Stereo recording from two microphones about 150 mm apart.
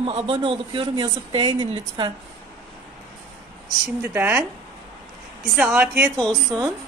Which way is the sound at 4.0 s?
10° right (ahead or behind).